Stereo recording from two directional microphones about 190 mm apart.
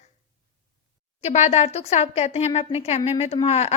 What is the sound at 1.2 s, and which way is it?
A woman's voice, 35° left (ahead or behind).